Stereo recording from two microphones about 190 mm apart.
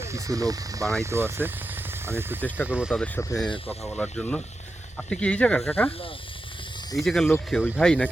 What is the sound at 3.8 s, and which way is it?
Speech, 5° left (ahead or behind).